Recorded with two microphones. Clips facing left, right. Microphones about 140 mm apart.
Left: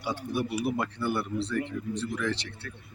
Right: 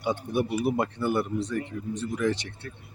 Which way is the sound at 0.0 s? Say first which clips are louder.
Right 4 dB; 20° right (ahead or behind).